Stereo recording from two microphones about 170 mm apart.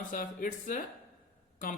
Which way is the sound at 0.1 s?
50° left (ahead or behind).